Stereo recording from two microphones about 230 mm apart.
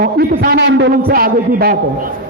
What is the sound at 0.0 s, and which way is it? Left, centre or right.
A man's voice, right.